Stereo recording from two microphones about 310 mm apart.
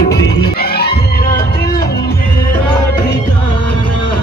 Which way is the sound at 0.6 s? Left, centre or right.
Left.